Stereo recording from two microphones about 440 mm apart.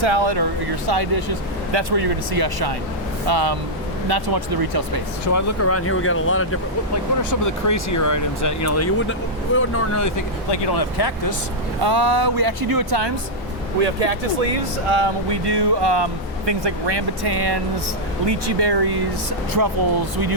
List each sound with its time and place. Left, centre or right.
0.0 s speech: right
0.9 s speech: right
5.3 s speech: left
7.3 s speech: left
10.5 s speech: left
11.8 s speech: right
14.8 s speech: right